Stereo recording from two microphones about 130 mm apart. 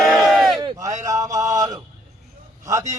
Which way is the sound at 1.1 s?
25° right (ahead or behind).